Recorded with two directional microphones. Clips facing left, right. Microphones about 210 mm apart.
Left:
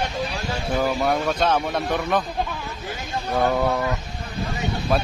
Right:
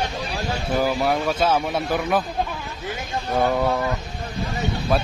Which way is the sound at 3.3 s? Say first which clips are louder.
Even; 5° right (ahead or behind).